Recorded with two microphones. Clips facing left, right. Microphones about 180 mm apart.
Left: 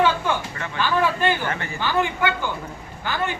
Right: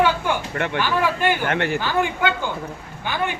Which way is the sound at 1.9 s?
15° right (ahead or behind).